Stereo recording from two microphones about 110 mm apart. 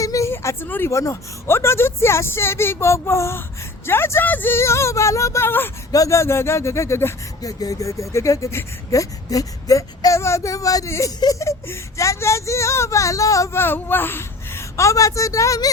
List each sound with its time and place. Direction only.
0.0 s speech: 30° left (ahead or behind)